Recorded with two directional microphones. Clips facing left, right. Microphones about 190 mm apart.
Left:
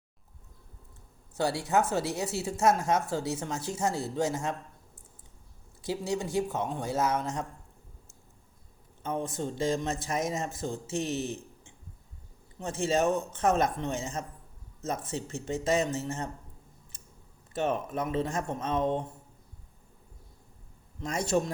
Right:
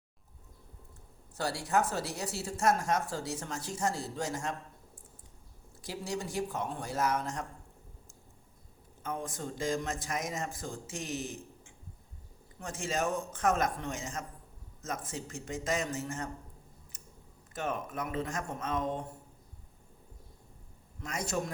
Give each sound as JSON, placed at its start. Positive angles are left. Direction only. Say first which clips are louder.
{"t": 1.5, "sound": "speech", "louder": "left 4 dB", "side_deg": 0}
{"t": 2.4, "sound": "speech", "louder": "left 3 dB", "side_deg": 20}
{"t": 6.1, "sound": "speech", "louder": "left 4 dB", "side_deg": 0}
{"t": 6.3, "sound": "speech", "louder": "left 5 dB", "side_deg": 25}
{"t": 9.0, "sound": "speech", "louder": "left 5 dB", "side_deg": 25}
{"t": 17.5, "sound": "speech", "louder": "left 6 dB", "side_deg": 30}
{"t": 21.0, "sound": "speech", "louder": "left 6 dB", "side_deg": 30}